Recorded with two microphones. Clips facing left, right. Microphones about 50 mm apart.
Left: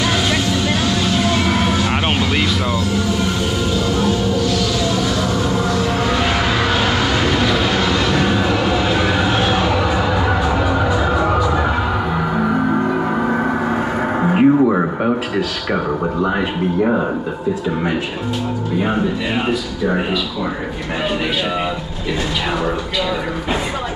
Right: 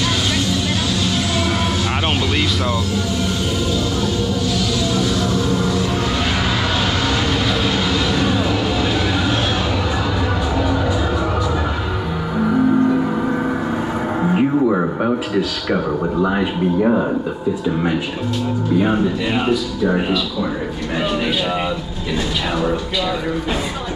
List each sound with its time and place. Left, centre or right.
0.0 s music: centre
4.5 s music: centre
12.4 s gong: centre
14.2 s music: left
16.2 s speech: centre